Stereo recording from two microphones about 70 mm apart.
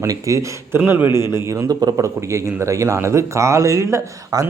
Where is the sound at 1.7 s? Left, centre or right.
Right.